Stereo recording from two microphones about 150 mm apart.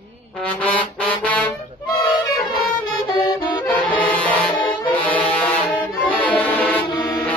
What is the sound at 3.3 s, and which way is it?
Saxophone, 30° left (ahead or behind).